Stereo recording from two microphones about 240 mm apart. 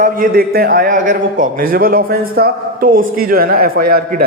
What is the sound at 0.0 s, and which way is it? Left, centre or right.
Speech, right.